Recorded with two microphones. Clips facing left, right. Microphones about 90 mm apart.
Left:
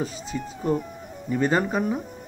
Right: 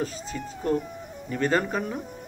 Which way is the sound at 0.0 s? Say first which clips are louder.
Left 1 dB; 5° left (ahead or behind).